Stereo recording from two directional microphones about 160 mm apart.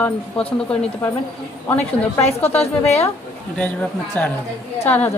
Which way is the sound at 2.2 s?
40° left (ahead or behind).